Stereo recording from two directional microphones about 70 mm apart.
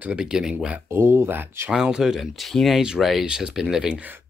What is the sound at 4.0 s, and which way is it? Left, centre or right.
Speech, right.